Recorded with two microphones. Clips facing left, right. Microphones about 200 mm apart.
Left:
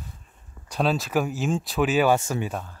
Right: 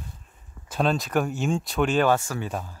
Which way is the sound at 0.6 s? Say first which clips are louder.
Even; centre (ahead or behind).